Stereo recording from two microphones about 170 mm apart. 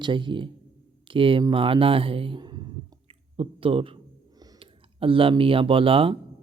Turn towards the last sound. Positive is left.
turn(degrees=-30)  # may be behind; listen again after turning